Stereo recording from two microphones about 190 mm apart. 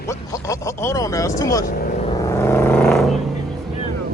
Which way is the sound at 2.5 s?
5° left (ahead or behind).